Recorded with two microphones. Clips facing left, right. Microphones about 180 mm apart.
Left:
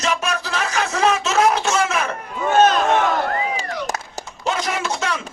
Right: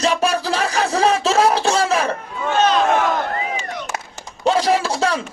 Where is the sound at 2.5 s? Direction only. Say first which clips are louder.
Left 2 dB; 45° left (ahead or behind).